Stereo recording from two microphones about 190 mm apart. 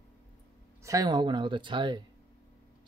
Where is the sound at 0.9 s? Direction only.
20° right (ahead or behind).